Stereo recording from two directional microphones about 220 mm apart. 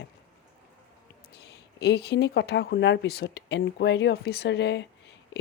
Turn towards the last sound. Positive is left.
turn(degrees=50)  # may be behind; listen again after turning